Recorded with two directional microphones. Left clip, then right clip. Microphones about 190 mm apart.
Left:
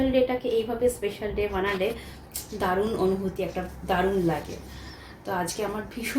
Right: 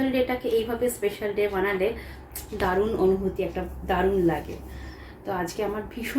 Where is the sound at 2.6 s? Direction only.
15° right (ahead or behind).